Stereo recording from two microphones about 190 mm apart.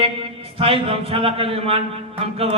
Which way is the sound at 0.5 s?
30° right (ahead or behind).